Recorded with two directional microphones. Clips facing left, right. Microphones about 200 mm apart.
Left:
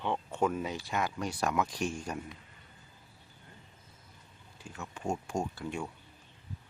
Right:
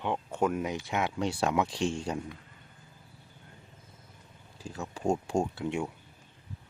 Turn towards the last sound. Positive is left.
turn(degrees=-20)  # may be behind; listen again after turning